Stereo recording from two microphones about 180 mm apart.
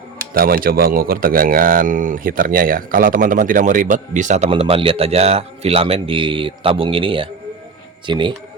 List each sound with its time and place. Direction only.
0.3 s a man's voice: 55° right (ahead or behind)
4.4 s a man's voice: 30° right (ahead or behind)